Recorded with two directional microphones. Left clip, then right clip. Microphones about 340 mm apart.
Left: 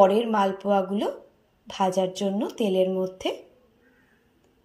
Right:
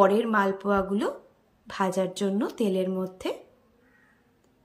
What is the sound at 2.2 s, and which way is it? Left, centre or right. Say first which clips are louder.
Speech: left 1 dB; right.